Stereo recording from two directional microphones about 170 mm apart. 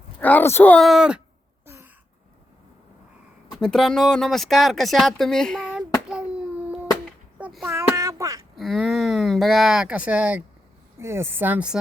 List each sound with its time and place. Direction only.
0.2 s speech: 10° left (ahead or behind)
0.9 s speech: 5° right (ahead or behind)
1.6 s a sound: 15° right (ahead or behind)
3.6 s speech: 5° left (ahead or behind)
6.1 s a sound: 5° right (ahead or behind)
8.5 s speech: centre (ahead or behind)